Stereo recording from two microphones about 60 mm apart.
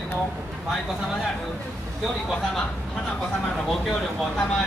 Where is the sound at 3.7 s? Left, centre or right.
Centre.